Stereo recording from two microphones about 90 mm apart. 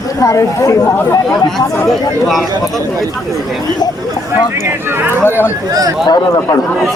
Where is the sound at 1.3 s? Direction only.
5° left (ahead or behind).